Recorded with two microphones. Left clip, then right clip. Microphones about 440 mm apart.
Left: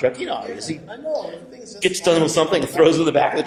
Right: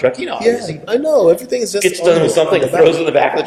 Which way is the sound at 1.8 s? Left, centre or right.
Left.